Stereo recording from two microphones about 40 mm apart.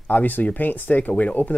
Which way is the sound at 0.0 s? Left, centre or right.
Left.